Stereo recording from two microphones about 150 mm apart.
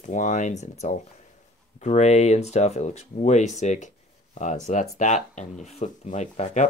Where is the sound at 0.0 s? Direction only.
60° left (ahead or behind).